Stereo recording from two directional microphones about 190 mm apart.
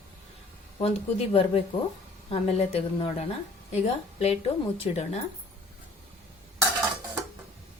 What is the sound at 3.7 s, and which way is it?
A woman's voice, 35° left (ahead or behind).